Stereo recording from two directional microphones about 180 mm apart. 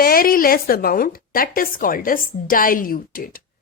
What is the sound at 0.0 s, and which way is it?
Speech, 55° left (ahead or behind).